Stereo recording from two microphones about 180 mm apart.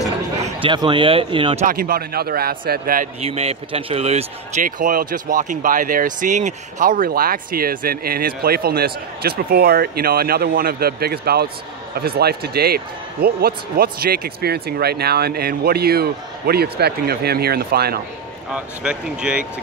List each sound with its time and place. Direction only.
0.6 s speech: 25° right (ahead or behind)
1.7 s speech: 55° right (ahead or behind)
3.2 s speech: 35° right (ahead or behind)
4.6 s speech: 50° right (ahead or behind)
18.5 s speech: 5° right (ahead or behind)